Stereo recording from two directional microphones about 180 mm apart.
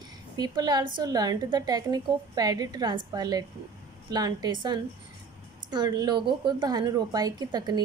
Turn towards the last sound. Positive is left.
turn(degrees=-20)  # may be behind; listen again after turning